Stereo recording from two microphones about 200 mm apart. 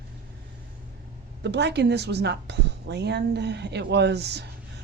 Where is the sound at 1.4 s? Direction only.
60° right (ahead or behind).